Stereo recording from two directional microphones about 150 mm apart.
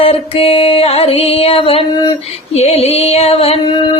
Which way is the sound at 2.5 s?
45° left (ahead or behind).